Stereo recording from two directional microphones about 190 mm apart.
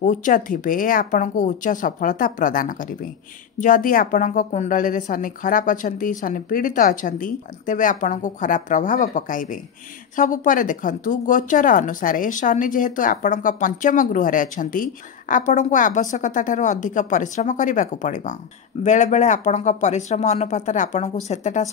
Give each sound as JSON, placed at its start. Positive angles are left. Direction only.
{"t": 0.0, "sound": "a woman's voice", "side_deg": 45}